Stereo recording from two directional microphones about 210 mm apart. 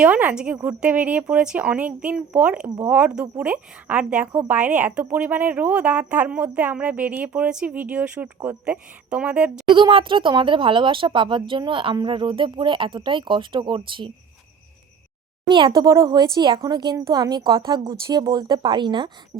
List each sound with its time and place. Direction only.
0.0 s a woman's voice: 5° right (ahead or behind)
9.6 s speech: 25° right (ahead or behind)
15.4 s speech: 20° right (ahead or behind)